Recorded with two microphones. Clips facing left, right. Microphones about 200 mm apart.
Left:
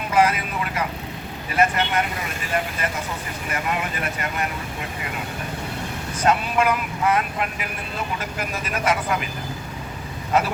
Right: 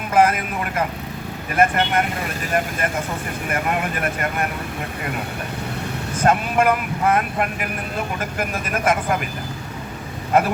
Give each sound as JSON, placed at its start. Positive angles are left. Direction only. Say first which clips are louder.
{"t": 0.1, "sound": "vehicle", "louder": "right 3 dB", "side_deg": -50}
{"t": 1.5, "sound": "speech", "louder": "right 2 dB", "side_deg": -50}
{"t": 3.5, "sound": "speech", "louder": "right 3 dB", "side_deg": -50}
{"t": 6.1, "sound": "speech", "louder": "right 2 dB", "side_deg": -50}
{"t": 10.3, "sound": "speech", "louder": "right 3 dB", "side_deg": -55}